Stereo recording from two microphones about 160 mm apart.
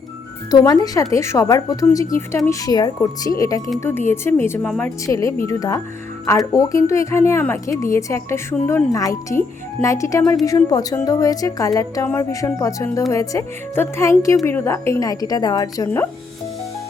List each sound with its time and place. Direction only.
0.5 s a woman's voice: 25° left (ahead or behind)